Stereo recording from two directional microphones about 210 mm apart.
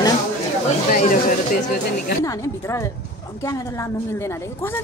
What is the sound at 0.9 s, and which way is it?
Speech, 40° left (ahead or behind).